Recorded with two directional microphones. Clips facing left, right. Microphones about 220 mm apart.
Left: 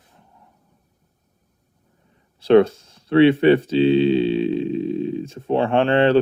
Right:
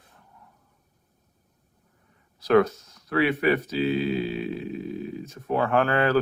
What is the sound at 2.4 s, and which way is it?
Speech, 30° left (ahead or behind).